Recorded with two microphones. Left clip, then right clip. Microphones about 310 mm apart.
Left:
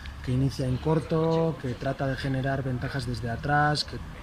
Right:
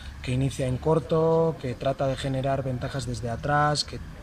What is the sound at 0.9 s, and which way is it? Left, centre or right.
Speech, centre.